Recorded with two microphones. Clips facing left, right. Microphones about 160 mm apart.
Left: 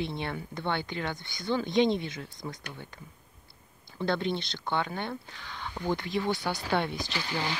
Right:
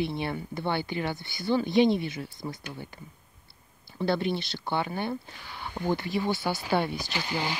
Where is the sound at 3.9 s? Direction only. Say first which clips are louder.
Right 2 dB; 5° right (ahead or behind).